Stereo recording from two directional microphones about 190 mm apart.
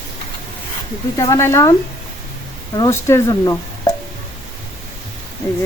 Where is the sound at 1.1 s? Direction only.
15° left (ahead or behind).